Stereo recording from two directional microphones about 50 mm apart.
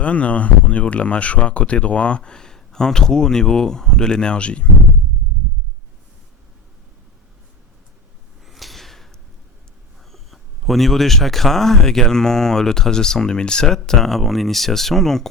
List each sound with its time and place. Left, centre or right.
0.0 s speech: left
8.4 s a sound: centre
10.1 s a man's voice: centre